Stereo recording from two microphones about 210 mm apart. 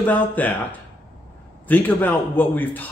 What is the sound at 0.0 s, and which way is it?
Speech, 10° left (ahead or behind).